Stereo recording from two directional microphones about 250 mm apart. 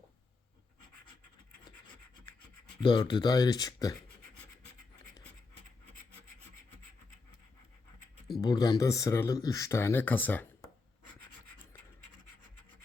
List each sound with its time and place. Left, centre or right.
2.8 s speech: centre
8.4 s speech: centre